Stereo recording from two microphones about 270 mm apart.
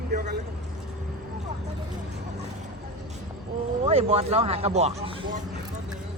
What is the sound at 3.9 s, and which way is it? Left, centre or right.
Speech, right.